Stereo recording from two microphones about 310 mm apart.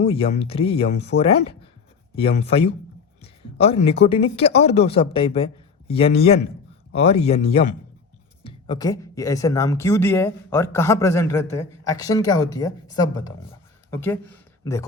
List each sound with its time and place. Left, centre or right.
0.0 s speech: centre